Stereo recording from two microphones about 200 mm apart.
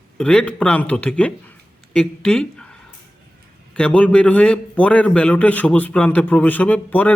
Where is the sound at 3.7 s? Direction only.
5° left (ahead or behind).